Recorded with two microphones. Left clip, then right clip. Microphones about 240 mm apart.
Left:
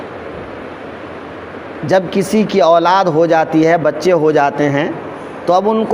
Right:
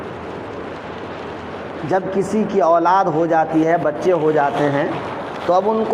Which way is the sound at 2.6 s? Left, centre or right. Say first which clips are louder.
Left 3 dB; left.